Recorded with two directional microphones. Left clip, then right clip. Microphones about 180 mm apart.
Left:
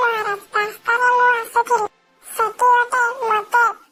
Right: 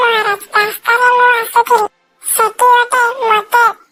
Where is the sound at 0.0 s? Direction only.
25° right (ahead or behind).